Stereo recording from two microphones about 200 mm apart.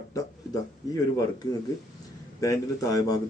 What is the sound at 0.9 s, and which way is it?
A man's voice, 20° left (ahead or behind).